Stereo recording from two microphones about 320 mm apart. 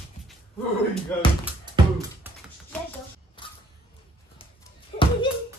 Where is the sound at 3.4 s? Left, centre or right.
Centre.